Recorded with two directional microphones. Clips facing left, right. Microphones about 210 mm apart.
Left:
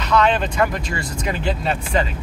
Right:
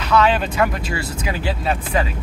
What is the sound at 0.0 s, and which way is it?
Speech, 5° right (ahead or behind).